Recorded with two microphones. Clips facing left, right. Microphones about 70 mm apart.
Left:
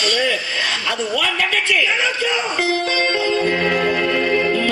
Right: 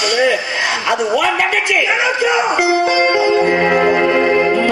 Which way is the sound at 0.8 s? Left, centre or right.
Right.